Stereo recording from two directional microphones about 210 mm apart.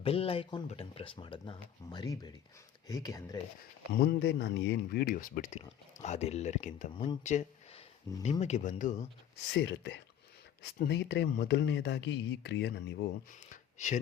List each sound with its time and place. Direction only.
0.0 s speech: 25° left (ahead or behind)
3.9 s speech: 50° left (ahead or behind)
8.2 s speech: 30° left (ahead or behind)
9.5 s speech: 55° left (ahead or behind)
13.5 s a sound: 35° left (ahead or behind)